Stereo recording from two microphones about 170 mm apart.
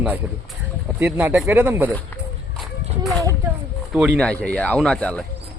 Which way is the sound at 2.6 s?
Centre (ahead or behind).